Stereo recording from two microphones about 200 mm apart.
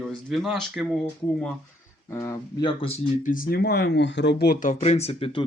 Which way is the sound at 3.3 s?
45° left (ahead or behind).